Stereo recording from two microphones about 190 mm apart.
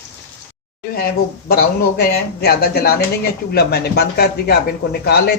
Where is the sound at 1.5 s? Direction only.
55° left (ahead or behind).